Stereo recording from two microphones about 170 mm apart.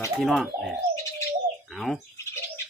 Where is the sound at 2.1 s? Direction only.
15° left (ahead or behind).